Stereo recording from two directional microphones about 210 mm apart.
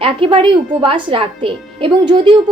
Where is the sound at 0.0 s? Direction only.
25° right (ahead or behind).